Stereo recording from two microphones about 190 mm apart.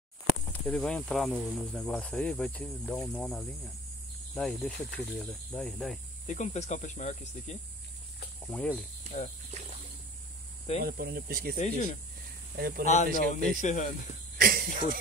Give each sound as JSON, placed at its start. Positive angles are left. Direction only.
{"t": 0.5, "sound": "speech", "side_deg": 5}
{"t": 6.2, "sound": "speech", "side_deg": 40}
{"t": 8.5, "sound": "speech", "side_deg": 5}
{"t": 9.1, "sound": "speech", "side_deg": -40}
{"t": 10.8, "sound": "speech", "side_deg": -55}
{"t": 11.5, "sound": "speech", "side_deg": 40}
{"t": 12.5, "sound": "speech", "side_deg": -50}
{"t": 12.8, "sound": "speech", "side_deg": 40}
{"t": 13.2, "sound": "speech", "side_deg": -50}
{"t": 13.6, "sound": "speech", "side_deg": 40}
{"t": 14.4, "sound": "speech", "side_deg": -50}